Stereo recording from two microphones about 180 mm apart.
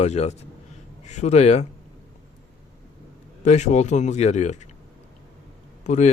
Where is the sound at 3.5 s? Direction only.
40° left (ahead or behind).